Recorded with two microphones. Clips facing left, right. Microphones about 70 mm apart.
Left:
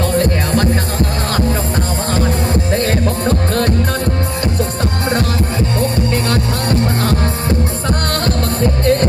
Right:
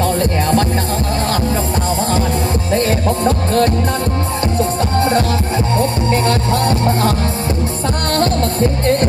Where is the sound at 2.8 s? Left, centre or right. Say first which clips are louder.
Right 1 dB; left.